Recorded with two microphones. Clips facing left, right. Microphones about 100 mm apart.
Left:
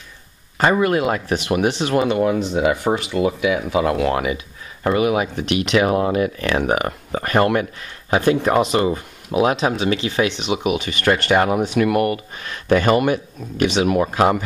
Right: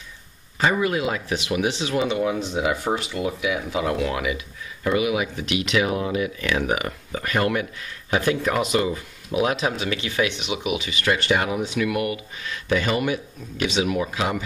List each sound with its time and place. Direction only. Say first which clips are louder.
0.6 s speech: left 5 dB; 55° left (ahead or behind)
4.8 s speech: left 4 dB; 45° left (ahead or behind)